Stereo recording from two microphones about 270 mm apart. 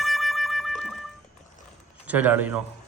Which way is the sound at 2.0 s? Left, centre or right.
Centre.